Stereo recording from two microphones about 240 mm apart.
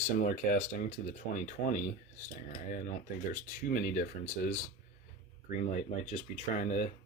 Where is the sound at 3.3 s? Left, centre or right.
Left.